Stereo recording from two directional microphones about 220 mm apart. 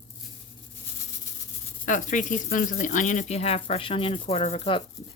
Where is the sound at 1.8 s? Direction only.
35° left (ahead or behind).